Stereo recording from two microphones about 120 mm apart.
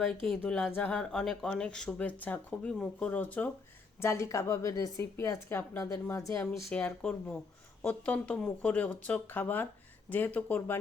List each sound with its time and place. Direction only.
0.0 s speech: 5° left (ahead or behind)
4.0 s a woman's voice: 25° left (ahead or behind)
6.7 s speech: 10° left (ahead or behind)